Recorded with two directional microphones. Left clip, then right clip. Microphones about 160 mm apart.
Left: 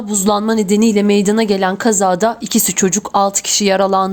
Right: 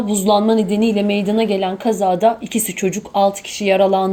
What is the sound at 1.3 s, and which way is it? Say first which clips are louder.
A woman's voice: left 3 dB; 80° left.